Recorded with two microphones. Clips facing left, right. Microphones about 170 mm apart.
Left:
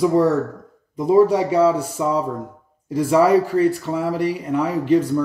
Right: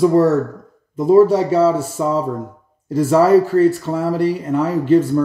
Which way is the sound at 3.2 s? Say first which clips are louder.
Right 4 dB; 15° left (ahead or behind).